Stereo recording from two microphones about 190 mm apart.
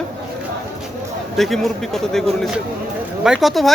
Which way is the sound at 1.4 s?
Centre (ahead or behind).